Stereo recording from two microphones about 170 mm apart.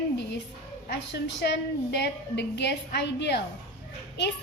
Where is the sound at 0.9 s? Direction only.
80° left.